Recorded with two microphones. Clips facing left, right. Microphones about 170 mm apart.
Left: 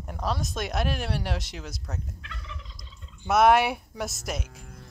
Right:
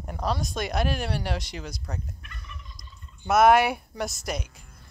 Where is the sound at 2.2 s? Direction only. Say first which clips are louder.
Left 3 dB; 90° left.